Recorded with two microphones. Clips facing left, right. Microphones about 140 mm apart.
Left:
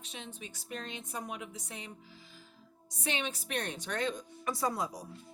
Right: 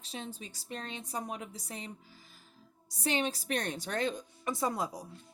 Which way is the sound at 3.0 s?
40° right (ahead or behind).